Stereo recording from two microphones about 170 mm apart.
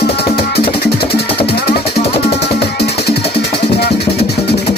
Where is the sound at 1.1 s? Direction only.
70° left (ahead or behind).